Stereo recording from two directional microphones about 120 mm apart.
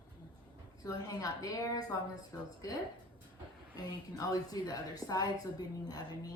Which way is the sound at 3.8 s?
30° left (ahead or behind).